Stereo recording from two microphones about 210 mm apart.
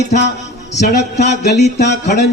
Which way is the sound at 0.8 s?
55° left (ahead or behind).